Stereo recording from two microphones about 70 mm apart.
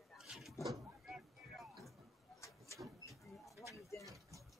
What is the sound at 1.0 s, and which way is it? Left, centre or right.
Music, centre.